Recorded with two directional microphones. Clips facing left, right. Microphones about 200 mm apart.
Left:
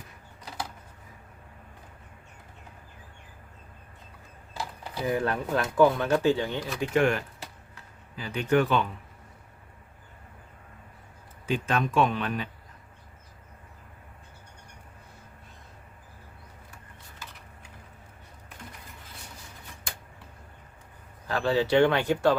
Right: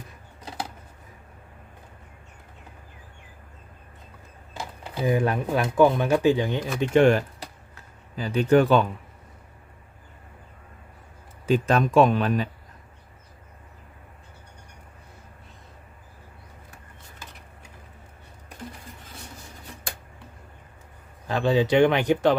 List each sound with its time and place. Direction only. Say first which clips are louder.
4.5 s speech: right 2 dB; 20° right (ahead or behind); by 8.8 s 35° right (ahead or behind)
11.4 s speech: right 6 dB; 40° right (ahead or behind)
21.2 s speech: right 3 dB; 20° right (ahead or behind)